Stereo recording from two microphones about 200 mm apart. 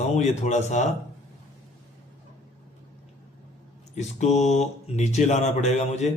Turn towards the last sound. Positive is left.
turn(degrees=35)  # may be behind; listen again after turning